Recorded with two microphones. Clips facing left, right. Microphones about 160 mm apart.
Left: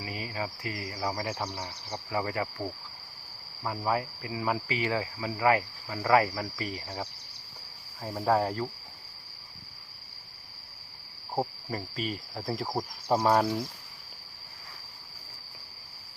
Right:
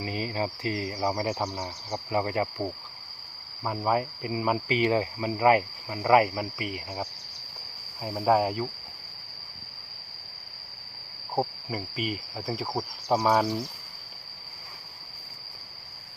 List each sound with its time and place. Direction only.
0.0 s speech: 25° right (ahead or behind)
8.2 s speech: 10° right (ahead or behind)
11.3 s cricket: 5° right (ahead or behind)